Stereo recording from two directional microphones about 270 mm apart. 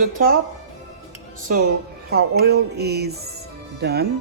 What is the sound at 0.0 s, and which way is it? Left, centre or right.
Music, right.